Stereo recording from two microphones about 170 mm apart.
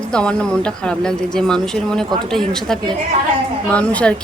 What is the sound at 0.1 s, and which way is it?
A woman's voice, 5° left (ahead or behind).